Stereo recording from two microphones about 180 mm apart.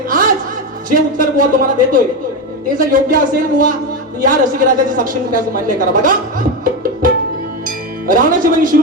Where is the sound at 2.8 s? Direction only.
50° right (ahead or behind).